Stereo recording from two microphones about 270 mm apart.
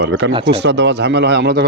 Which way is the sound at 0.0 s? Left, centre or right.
Right.